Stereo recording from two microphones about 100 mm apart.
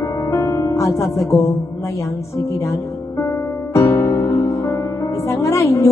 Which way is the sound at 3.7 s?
30° left (ahead or behind).